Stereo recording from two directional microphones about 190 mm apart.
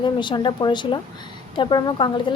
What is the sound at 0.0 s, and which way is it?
A woman's voice, 25° left (ahead or behind).